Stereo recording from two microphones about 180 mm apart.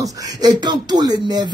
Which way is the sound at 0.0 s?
20° right (ahead or behind).